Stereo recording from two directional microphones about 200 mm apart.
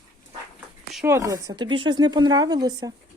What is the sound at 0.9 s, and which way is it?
Speech, 10° right (ahead or behind).